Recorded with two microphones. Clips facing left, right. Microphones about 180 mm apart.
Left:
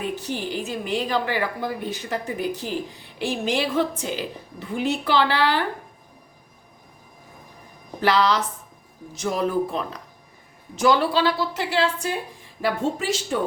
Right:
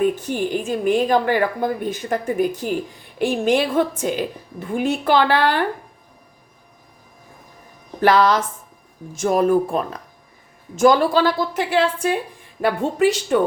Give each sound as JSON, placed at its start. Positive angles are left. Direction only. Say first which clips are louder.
{"t": 0.0, "sound": "a woman's voice", "louder": "right 8 dB", "side_deg": -50}
{"t": 8.0, "sound": "a woman's voice", "louder": "right 5 dB", "side_deg": -50}